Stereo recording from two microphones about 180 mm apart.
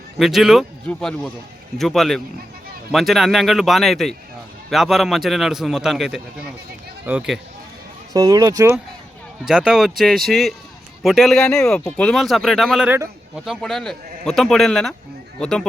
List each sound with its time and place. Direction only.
0.2 s speech: centre (ahead or behind)
8.1 s speech: 20° right (ahead or behind)
9.4 s speech: 5° right (ahead or behind)